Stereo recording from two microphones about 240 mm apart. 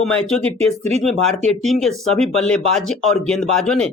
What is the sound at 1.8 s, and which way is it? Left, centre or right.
Speech, centre.